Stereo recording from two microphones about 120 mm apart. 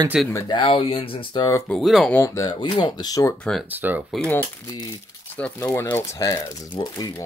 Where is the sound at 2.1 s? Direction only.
20° left (ahead or behind).